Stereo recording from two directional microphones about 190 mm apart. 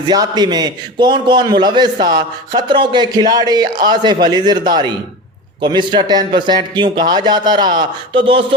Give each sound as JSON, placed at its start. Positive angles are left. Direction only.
{"t": 0.1, "sound": "a man's voice", "side_deg": -20}